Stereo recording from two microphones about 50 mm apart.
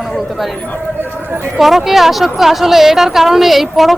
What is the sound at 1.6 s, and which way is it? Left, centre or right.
A man's voice, centre.